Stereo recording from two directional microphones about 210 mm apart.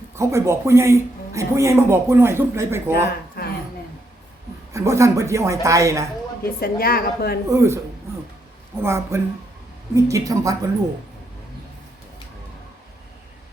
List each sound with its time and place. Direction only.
0.2 s speech: 15° right (ahead or behind)
2.9 s a sound: 45° left (ahead or behind)
4.7 s speech: 15° right (ahead or behind)
6.4 s a woman's voice: 45° left (ahead or behind)
7.5 s speech: 15° right (ahead or behind)
8.8 s speech: 15° right (ahead or behind)